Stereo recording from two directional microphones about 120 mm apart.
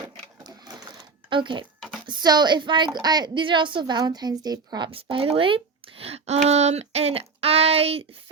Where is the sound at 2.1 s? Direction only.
35° right (ahead or behind).